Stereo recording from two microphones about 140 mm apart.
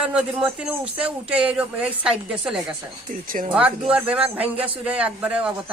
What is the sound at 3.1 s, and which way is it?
Speech, 75° right (ahead or behind).